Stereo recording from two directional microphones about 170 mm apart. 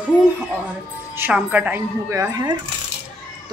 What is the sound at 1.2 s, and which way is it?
Speech, 10° right (ahead or behind).